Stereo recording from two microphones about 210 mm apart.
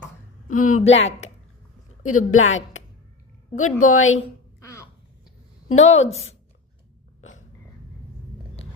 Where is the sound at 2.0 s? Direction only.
85° left; by 2.8 s 65° left (ahead or behind).